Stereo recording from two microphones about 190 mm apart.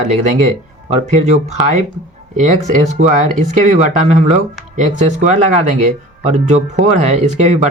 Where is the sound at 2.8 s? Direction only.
35° right (ahead or behind).